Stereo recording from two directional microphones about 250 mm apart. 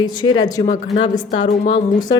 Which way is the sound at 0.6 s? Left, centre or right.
Left.